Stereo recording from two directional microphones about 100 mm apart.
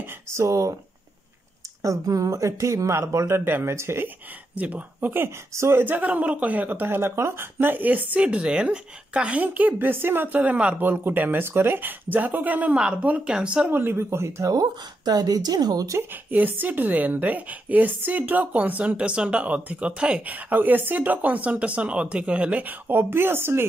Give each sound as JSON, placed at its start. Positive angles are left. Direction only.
{"t": 0.0, "sound": "speech", "side_deg": -25}
{"t": 1.8, "sound": "speech", "side_deg": -35}
{"t": 4.6, "sound": "a woman's voice", "side_deg": -15}
{"t": 13.7, "sound": "a woman's voice", "side_deg": -25}
{"t": 16.0, "sound": "a woman's voice", "side_deg": -20}